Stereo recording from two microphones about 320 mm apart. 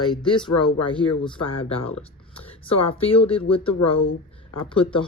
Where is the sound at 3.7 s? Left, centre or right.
Left.